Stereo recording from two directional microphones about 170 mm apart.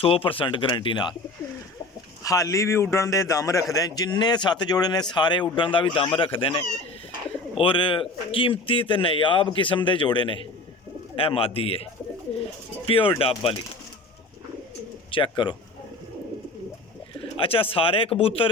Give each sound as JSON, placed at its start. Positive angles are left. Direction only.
{"t": 0.0, "sound": "speech", "side_deg": 30}
{"t": 2.2, "sound": "a man's voice", "side_deg": 20}
{"t": 15.1, "sound": "a man's voice", "side_deg": 30}
{"t": 17.4, "sound": "speech", "side_deg": 30}